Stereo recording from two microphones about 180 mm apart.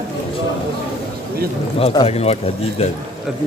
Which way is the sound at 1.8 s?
35° left (ahead or behind).